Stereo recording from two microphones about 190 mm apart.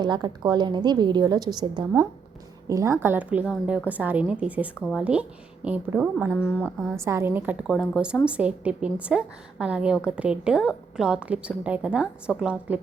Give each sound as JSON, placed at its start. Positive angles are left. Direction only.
{"t": 0.0, "sound": "a woman's voice", "side_deg": -20}
{"t": 7.0, "sound": "a woman's voice", "side_deg": -15}